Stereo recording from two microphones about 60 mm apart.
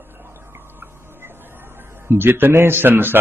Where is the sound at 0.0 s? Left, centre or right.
Right.